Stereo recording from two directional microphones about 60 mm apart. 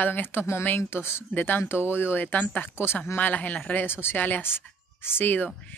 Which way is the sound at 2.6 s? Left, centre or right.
Left.